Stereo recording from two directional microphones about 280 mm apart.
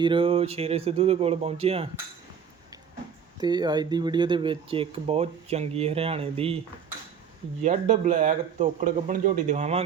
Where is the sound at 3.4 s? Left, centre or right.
Centre.